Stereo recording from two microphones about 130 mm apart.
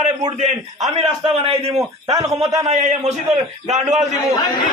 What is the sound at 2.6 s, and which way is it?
A man's voice, 60° right (ahead or behind).